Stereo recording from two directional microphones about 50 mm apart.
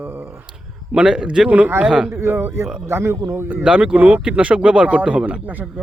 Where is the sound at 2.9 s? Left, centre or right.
Right.